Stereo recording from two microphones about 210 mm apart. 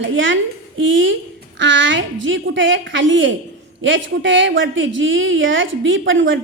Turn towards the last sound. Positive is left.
turn(degrees=-65)  # may be behind; listen again after turning